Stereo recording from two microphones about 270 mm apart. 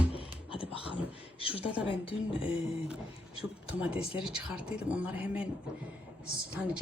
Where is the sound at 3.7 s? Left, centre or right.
Centre.